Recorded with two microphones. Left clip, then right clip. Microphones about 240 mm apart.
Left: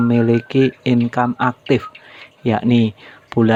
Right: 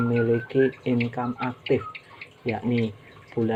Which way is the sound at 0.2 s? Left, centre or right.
Left.